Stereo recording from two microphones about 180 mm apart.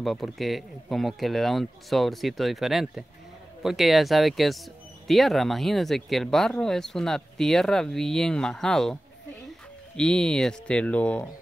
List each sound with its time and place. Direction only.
0.0 s speech: centre (ahead or behind)
9.9 s speech: 5° left (ahead or behind)